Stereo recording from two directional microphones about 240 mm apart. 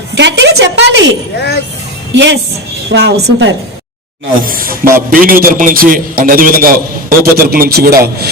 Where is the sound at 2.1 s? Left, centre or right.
Right.